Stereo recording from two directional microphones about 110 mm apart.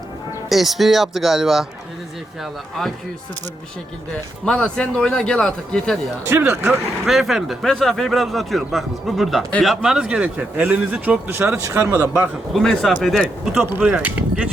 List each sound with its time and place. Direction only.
0.5 s speech: centre (ahead or behind)
4.4 s speech: 10° left (ahead or behind)
6.4 s a man's voice: 5° right (ahead or behind)
12.5 s a man's voice: centre (ahead or behind)